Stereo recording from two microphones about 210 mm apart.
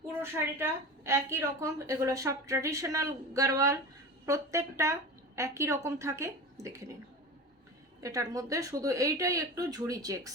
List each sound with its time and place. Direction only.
0.2 s a woman's voice: 10° right (ahead or behind)
8.0 s a woman's voice: 15° right (ahead or behind)